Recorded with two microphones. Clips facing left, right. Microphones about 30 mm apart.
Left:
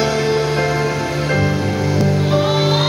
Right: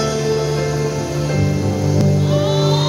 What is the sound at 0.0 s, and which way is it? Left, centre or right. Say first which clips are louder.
Music: left 2 dB; left.